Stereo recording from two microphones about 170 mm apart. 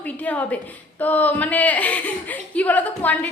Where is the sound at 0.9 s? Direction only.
10° left (ahead or behind).